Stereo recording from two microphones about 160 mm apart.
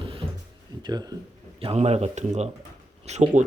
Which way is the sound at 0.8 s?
25° right (ahead or behind).